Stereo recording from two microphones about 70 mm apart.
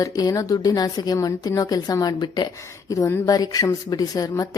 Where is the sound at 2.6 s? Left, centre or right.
Left.